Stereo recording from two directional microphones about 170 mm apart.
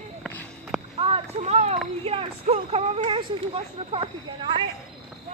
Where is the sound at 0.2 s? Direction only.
10° left (ahead or behind).